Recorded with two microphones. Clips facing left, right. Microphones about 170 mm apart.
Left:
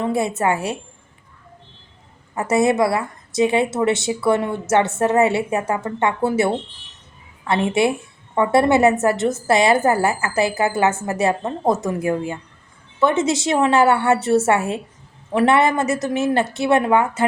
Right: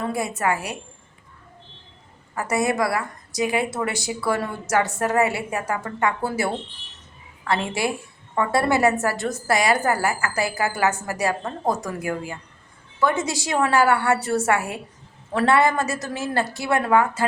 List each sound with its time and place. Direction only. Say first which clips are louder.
0.0 s a woman's voice: left 5 dB; 25° left (ahead or behind)
2.3 s a woman's voice: left 5 dB; 25° left (ahead or behind)